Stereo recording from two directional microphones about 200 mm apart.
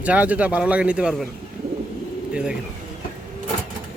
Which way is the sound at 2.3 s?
5° right (ahead or behind).